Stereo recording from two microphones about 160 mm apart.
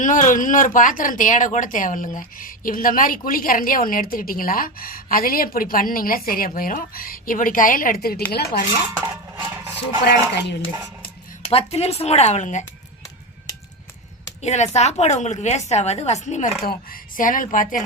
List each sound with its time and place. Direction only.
0.0 s speech: 55° left (ahead or behind); by 8.2 s 70° left (ahead or behind)
8.3 s speech: 80° left
9.0 s a sound: 15° right (ahead or behind)
10.0 s dishes: 90° left
11.4 s speech: 40° left (ahead or behind)
14.4 s a woman's voice: 45° left (ahead or behind)
16.6 s speech: 60° left (ahead or behind)